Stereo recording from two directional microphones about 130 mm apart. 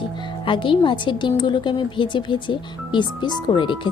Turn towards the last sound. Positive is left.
turn(degrees=40)  # may be behind; listen again after turning